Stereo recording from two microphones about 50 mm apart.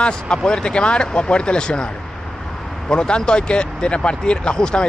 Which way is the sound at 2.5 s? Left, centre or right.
Centre.